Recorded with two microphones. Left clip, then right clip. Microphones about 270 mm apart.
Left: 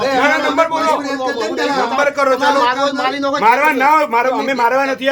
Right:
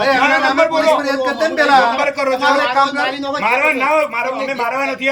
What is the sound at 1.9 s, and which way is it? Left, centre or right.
A man's voice, centre.